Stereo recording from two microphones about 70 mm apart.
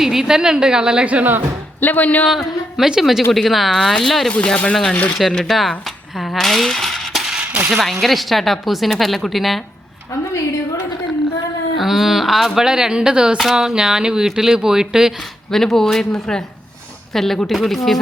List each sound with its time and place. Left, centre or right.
0.0 s speech: centre; by 1.4 s right
1.8 s speech: left
2.7 s a woman's voice: centre
4.3 s speech: centre
6.1 s coin: centre
7.3 s coin: centre
7.7 s a woman's voice: centre
11.8 s speech: centre
15.5 s a woman's voice: centre